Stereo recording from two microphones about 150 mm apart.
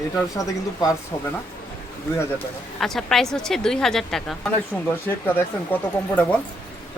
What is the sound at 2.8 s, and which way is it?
A woman's voice, centre (ahead or behind).